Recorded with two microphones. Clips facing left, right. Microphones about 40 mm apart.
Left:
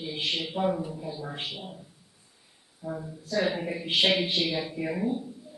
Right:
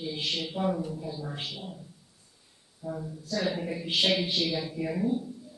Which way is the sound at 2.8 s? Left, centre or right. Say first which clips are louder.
Even; centre.